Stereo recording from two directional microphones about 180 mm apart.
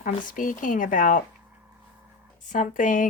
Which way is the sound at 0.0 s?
50° left (ahead or behind).